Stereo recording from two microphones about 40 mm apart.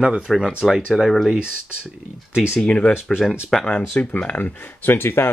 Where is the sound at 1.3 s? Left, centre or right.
Right.